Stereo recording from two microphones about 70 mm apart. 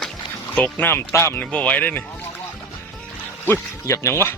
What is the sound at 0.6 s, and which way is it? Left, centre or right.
Speech, left.